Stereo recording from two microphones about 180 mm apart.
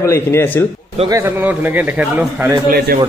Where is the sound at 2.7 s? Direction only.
60° right (ahead or behind).